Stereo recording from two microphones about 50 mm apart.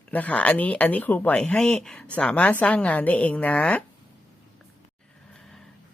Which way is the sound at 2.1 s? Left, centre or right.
Left.